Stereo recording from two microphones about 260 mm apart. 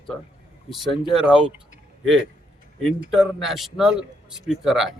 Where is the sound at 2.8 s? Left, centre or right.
Centre.